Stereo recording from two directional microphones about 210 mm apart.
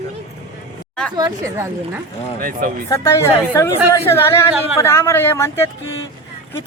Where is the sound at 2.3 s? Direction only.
45° right (ahead or behind).